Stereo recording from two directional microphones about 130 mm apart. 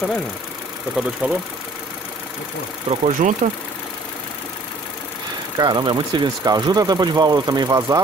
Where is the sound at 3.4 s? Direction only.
60° right (ahead or behind).